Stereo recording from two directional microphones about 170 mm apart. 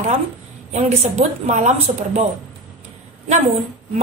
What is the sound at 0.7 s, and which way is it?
A woman's voice, 40° right (ahead or behind).